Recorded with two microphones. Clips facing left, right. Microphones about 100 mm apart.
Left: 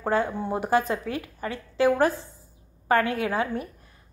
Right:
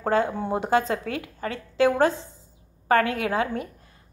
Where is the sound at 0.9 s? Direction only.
25° left (ahead or behind).